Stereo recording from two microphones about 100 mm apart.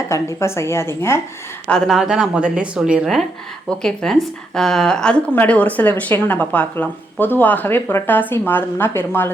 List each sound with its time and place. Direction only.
0.1 s a woman's voice: 30° left (ahead or behind)
1.6 s speech: 5° left (ahead or behind); by 9.3 s 20° left (ahead or behind)